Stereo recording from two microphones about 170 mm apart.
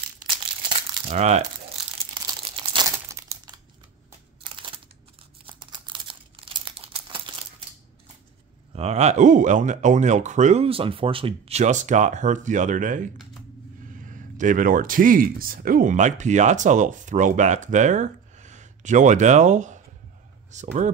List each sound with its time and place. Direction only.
0.7 s a sound: 30° right (ahead or behind)
1.1 s speech: 40° right (ahead or behind)
2.1 s crumpling: 25° right (ahead or behind)
4.4 s a sound: 30° right (ahead or behind)
5.4 s crumpling: 30° right (ahead or behind)
8.7 s speech: 40° right (ahead or behind)